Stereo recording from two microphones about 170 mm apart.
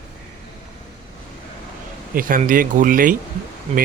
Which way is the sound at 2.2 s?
55° right (ahead or behind).